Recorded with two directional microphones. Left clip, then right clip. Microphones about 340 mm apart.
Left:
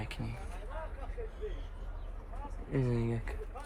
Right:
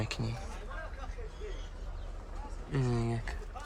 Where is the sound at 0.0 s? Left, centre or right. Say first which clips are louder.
Right 5 dB; centre.